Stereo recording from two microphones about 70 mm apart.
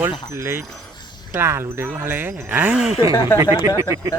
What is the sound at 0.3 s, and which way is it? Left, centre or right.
Speech, right.